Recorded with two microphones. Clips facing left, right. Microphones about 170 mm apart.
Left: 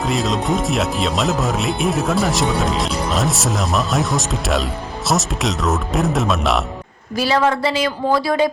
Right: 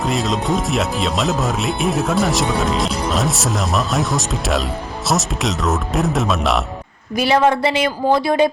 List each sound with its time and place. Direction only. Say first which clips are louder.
0.0 s speech: even; centre (ahead or behind)
7.2 s speech: right 2 dB; 20° right (ahead or behind)